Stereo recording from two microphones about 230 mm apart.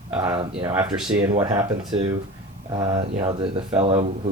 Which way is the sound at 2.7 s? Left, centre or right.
Right.